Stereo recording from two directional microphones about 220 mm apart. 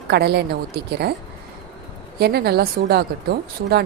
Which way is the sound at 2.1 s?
45° right (ahead or behind).